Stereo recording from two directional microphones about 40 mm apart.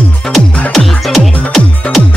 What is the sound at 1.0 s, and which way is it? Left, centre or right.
Music, centre.